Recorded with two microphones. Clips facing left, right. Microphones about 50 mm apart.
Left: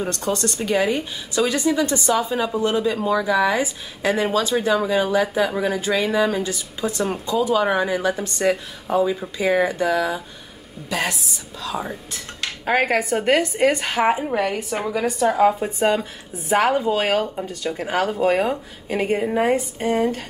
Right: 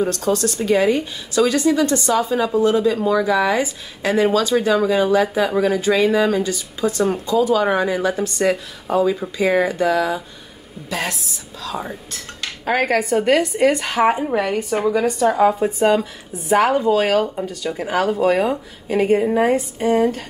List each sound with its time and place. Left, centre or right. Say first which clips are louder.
0.0 s a woman's voice: right 4 dB; centre
3.6 s speech: even; centre
4.6 s a woman's voice: right 3 dB; centre
8.4 s a woman's voice: right 2 dB; centre
13.8 s a woman's voice: right 2 dB; centre
17.8 s a woman's voice: right 3 dB; centre